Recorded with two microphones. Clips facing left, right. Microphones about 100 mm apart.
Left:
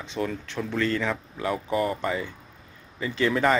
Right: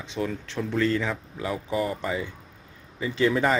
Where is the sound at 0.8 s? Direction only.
15° right (ahead or behind).